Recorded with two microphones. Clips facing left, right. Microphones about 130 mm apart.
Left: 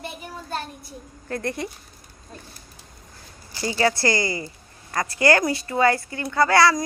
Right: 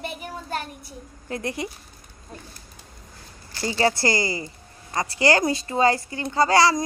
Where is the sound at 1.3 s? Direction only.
15° right (ahead or behind).